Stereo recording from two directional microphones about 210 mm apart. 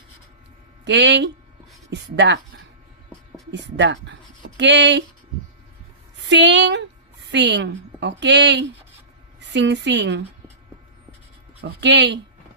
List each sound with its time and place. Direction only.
0.9 s a woman's voice: 55° right (ahead or behind)
3.5 s speech: 55° right (ahead or behind)
6.2 s a woman's voice: 55° right (ahead or behind)
11.6 s a woman's voice: 55° right (ahead or behind)